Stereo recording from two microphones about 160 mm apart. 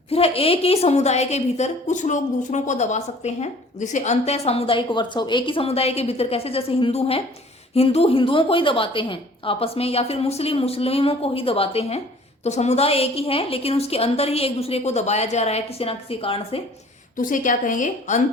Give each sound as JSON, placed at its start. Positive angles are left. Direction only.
{"t": 0.1, "sound": "a woman's voice", "side_deg": 35}
{"t": 17.2, "sound": "a woman's voice", "side_deg": 55}